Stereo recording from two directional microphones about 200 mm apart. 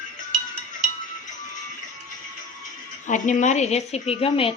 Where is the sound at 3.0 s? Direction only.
40° left (ahead or behind).